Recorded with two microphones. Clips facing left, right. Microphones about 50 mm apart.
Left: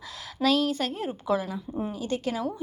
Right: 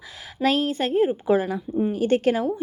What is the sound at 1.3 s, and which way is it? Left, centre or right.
A woman's voice, right.